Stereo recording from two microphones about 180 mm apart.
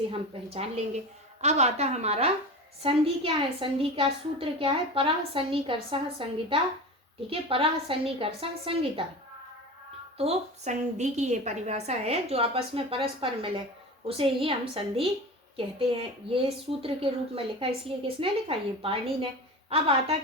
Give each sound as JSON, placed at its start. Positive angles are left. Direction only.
{"t": 0.1, "sound": "a woman's voice", "side_deg": -35}
{"t": 10.2, "sound": "a woman's voice", "side_deg": -35}